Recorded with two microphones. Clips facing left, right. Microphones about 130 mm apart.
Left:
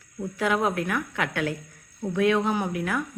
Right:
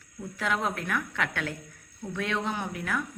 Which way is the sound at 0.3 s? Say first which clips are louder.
Left 5 dB; 10° left (ahead or behind).